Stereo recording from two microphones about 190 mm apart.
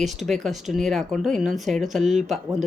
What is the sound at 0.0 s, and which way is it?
Speech, centre (ahead or behind).